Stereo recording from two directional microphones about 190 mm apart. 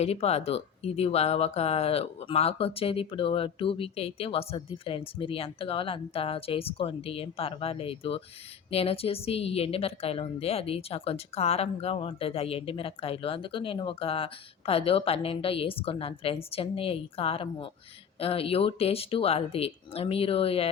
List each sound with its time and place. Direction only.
0.0 s a woman's voice: 35° left (ahead or behind)